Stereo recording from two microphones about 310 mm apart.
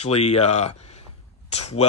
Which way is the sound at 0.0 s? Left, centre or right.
Centre.